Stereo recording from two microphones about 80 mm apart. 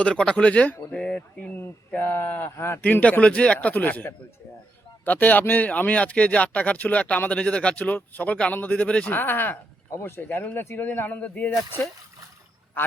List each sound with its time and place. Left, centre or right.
0.0 s speech: centre
2.0 s speech: left
2.8 s speech: centre
9.1 s speech: left